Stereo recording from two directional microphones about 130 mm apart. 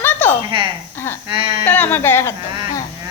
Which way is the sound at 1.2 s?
45° right (ahead or behind).